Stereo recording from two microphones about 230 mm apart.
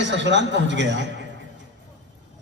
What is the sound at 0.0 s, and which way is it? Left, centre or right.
A man's voice, right.